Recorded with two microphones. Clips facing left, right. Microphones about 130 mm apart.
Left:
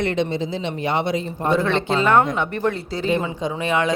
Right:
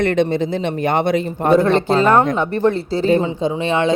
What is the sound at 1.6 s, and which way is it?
A woman's voice, 40° right (ahead or behind).